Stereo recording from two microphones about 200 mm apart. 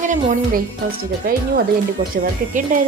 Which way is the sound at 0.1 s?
40° right (ahead or behind).